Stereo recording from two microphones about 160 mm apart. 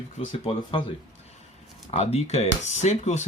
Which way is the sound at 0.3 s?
35° left (ahead or behind).